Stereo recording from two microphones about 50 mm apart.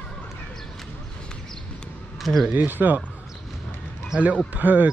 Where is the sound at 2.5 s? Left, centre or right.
Right.